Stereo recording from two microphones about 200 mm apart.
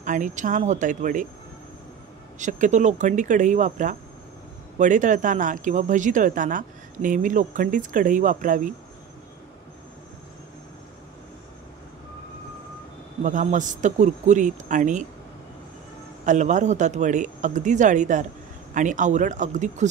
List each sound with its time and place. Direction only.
0.0 s speech: 40° right (ahead or behind)
2.3 s speech: 40° right (ahead or behind)
13.2 s speech: 40° right (ahead or behind)
16.3 s speech: 35° right (ahead or behind)